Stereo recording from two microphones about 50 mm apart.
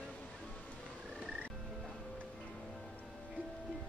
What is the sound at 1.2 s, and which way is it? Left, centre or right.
Frog, right.